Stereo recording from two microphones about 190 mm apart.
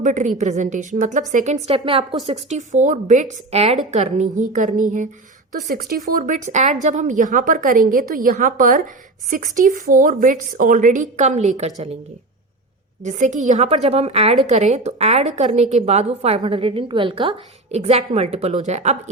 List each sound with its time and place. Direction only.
0.0 s a woman's voice: 40° right (ahead or behind)
1.6 s a woman's voice: 30° right (ahead or behind)
5.6 s a woman's voice: 55° right (ahead or behind); by 11.9 s 35° right (ahead or behind)
13.0 s a woman's voice: 40° right (ahead or behind)